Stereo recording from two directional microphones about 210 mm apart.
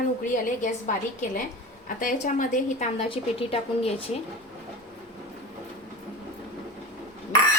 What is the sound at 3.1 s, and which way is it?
Speech, 25° left (ahead or behind).